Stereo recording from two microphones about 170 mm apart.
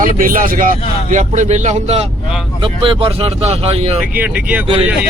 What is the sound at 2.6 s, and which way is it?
Speech, 30° right (ahead or behind).